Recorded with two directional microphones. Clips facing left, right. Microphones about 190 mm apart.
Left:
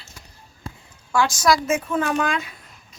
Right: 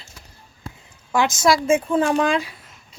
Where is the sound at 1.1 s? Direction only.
20° right (ahead or behind).